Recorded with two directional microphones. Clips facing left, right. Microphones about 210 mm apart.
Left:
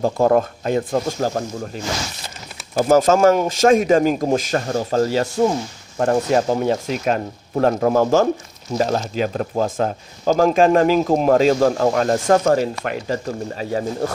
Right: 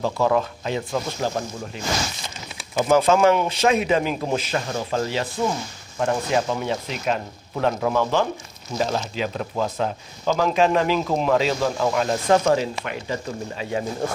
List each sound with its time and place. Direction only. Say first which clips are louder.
0.0 s speech: left 5 dB; 45° left (ahead or behind)
2.8 s speech: left 3 dB; 45° left (ahead or behind)